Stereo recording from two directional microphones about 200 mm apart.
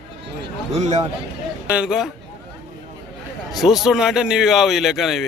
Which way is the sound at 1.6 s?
5° right (ahead or behind).